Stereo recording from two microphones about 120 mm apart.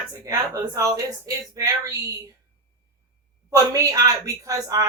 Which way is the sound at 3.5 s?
30° right (ahead or behind).